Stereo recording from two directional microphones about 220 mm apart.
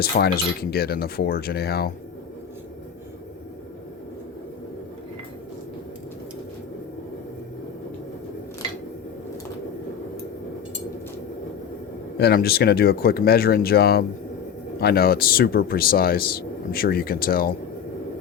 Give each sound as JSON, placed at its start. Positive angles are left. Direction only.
{"t": 0.0, "sound": "speech", "side_deg": 45}
{"t": 12.1, "sound": "speech", "side_deg": 45}